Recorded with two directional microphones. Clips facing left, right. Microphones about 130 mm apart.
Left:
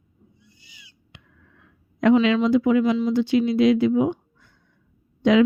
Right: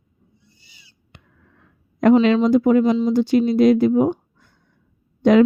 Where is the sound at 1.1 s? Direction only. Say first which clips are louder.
Right 2 dB; 45° right (ahead or behind).